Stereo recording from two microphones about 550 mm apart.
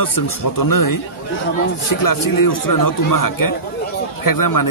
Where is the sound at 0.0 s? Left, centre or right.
Left.